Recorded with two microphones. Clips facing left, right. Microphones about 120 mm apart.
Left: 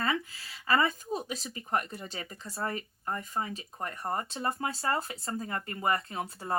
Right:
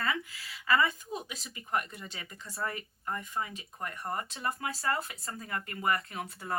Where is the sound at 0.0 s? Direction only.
30° left (ahead or behind).